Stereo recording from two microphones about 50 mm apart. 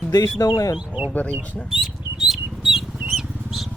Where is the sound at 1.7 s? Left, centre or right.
Centre.